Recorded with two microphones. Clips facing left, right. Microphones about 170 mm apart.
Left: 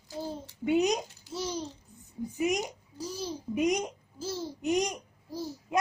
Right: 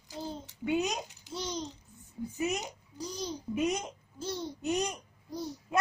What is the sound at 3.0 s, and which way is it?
Babbling, 5° left (ahead or behind).